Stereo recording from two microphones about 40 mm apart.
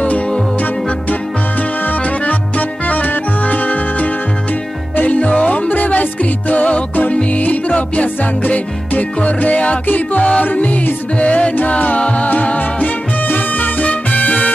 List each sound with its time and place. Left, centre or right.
1.9 s music: left